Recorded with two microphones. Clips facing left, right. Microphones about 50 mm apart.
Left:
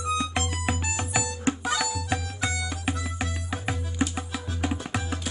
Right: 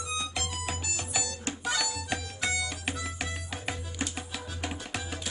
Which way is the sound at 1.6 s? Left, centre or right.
Centre.